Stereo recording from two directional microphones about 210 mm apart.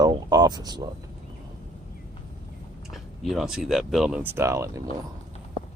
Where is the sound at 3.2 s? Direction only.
Centre (ahead or behind).